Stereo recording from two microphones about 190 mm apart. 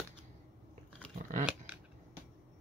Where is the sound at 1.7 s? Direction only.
10° right (ahead or behind).